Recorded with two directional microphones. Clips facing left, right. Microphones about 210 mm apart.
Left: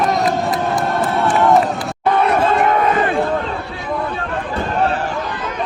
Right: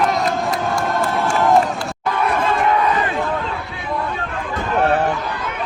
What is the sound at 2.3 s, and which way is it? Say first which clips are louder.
Crowd: left 3 dB; 45° left (ahead or behind).